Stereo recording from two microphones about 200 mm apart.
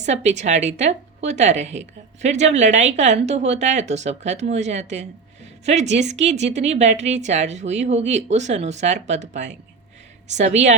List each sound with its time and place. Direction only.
0.0 s a woman's voice: 35° right (ahead or behind)